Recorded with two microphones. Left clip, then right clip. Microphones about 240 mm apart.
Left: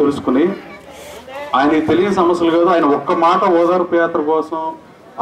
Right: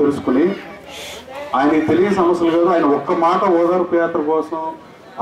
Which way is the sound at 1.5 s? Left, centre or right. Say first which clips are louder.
Left 2 dB; centre.